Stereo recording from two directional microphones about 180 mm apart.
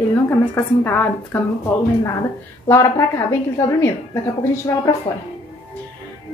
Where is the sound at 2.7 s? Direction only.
15° left (ahead or behind).